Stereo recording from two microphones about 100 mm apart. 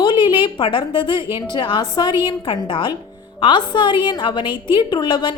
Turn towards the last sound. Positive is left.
turn(degrees=50)  # may be behind; listen again after turning